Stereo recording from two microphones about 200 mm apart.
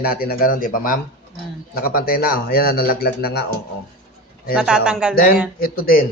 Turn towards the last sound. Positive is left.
turn(degrees=45)  # may be behind; listen again after turning